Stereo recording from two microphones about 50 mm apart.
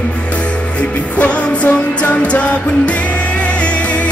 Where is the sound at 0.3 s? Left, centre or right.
Left.